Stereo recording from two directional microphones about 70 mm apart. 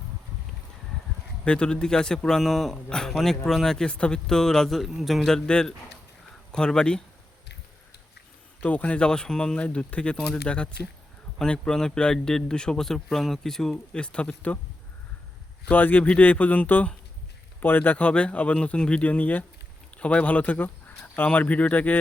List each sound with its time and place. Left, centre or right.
1.5 s speech: centre
8.6 s speech: centre
15.7 s speech: left